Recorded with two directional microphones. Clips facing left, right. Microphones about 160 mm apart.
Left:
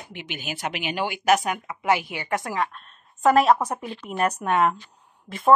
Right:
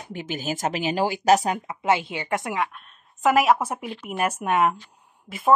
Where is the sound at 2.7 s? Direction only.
5° right (ahead or behind).